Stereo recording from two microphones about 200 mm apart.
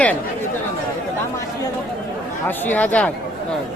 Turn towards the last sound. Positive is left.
turn(degrees=5)  # may be behind; listen again after turning